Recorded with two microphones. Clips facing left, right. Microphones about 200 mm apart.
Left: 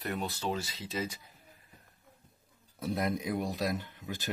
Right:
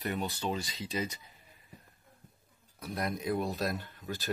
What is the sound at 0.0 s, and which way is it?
Speech, centre (ahead or behind).